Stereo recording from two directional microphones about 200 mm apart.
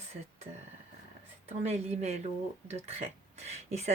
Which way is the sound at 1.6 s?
35° right (ahead or behind).